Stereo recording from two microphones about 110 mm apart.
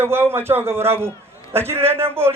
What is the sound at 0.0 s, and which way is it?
A man's voice, 20° right (ahead or behind).